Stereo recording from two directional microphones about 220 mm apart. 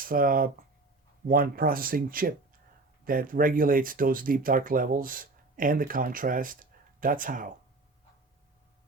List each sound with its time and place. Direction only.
0.0 s speech: 40° right (ahead or behind)